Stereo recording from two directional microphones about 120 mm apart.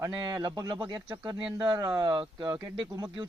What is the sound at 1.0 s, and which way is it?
Speech, 25° right (ahead or behind).